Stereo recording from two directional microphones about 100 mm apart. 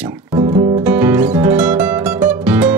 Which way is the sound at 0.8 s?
15° right (ahead or behind).